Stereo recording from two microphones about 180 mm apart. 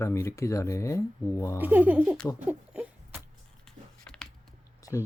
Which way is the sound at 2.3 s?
10° right (ahead or behind).